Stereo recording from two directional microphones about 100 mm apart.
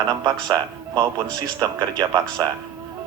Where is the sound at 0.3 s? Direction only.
35° right (ahead or behind).